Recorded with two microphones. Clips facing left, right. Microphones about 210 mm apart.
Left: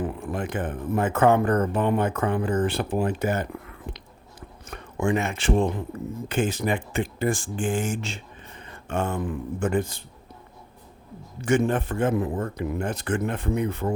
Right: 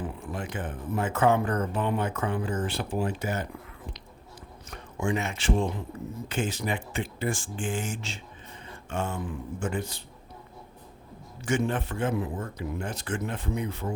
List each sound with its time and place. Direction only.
0.0 s speech: 55° left (ahead or behind)
3.9 s chewing: 60° left (ahead or behind)
6.2 s speech: 55° left (ahead or behind)
11.4 s speech: 50° left (ahead or behind)